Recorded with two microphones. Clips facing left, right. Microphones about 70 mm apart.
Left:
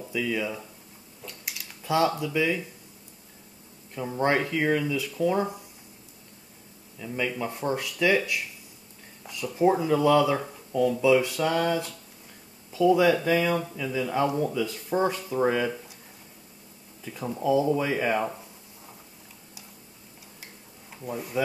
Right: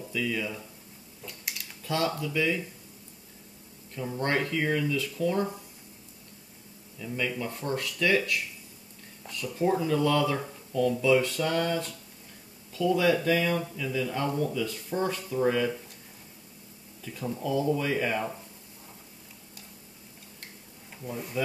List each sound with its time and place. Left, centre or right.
0.1 s speech: centre
1.2 s a sound: centre
1.9 s speech: centre
3.9 s speech: centre
7.0 s speech: centre
17.0 s speech: left
21.0 s speech: centre